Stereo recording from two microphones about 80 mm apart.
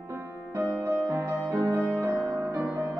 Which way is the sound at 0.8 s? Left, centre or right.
Right.